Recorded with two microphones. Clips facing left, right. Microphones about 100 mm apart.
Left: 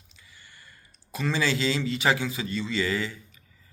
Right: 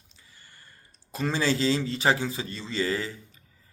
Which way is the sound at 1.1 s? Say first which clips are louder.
Right 1 dB; 40° right (ahead or behind).